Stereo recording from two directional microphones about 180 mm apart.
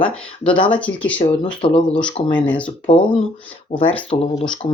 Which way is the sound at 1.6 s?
35° left (ahead or behind).